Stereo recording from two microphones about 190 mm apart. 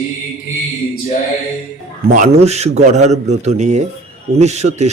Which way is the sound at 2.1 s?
40° right (ahead or behind).